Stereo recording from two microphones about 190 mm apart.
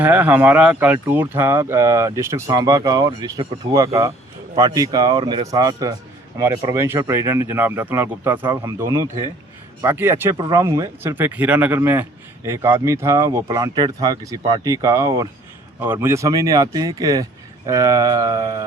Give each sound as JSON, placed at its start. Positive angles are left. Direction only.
{"t": 0.0, "sound": "a man's voice", "side_deg": -10}